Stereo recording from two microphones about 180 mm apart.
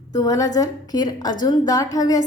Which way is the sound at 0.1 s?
20° left (ahead or behind).